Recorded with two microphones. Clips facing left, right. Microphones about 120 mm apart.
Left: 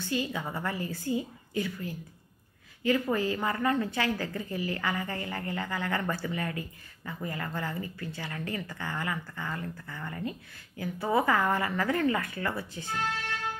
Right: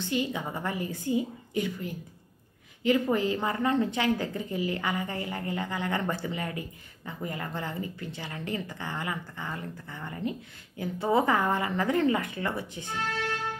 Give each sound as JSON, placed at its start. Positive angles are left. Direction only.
{"t": 0.0, "sound": "a woman's voice", "side_deg": -20}